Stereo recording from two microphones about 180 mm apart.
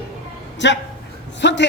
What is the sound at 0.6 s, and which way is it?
Speech, 90° left.